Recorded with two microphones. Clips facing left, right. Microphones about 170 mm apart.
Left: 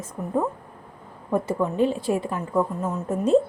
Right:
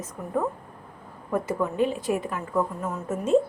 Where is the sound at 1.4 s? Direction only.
30° left (ahead or behind).